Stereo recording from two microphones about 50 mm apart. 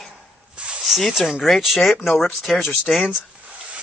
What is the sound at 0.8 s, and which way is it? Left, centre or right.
Speech, centre.